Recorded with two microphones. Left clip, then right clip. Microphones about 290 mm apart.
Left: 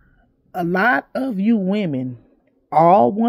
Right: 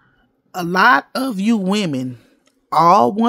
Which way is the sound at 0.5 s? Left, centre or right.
Centre.